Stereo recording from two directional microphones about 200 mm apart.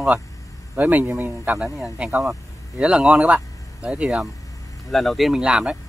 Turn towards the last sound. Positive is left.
turn(degrees=-5)  # may be behind; listen again after turning